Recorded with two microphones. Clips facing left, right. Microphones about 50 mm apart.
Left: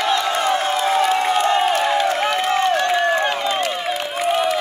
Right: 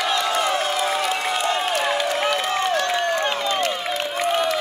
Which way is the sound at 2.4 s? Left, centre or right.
Left.